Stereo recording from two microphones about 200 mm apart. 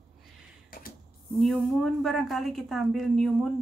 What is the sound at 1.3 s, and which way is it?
A woman's voice, centre (ahead or behind).